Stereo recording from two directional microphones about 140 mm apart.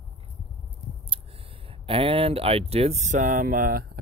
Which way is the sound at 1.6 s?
40° right (ahead or behind).